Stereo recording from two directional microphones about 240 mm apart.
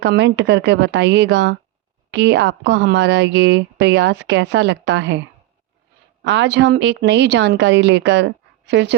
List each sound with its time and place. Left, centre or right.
0.0 s speech: right
6.2 s speech: right